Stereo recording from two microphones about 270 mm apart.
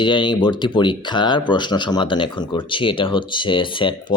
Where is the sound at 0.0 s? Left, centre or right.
Centre.